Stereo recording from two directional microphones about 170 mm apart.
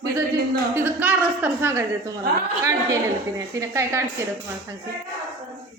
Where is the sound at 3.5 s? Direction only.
15° right (ahead or behind).